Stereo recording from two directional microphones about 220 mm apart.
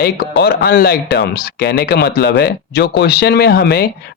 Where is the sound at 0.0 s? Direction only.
45° left (ahead or behind).